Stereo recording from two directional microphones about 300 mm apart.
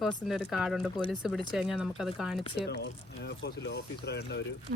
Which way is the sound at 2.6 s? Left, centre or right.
Left.